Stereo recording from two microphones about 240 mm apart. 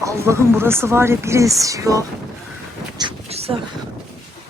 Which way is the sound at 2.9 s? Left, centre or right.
Right.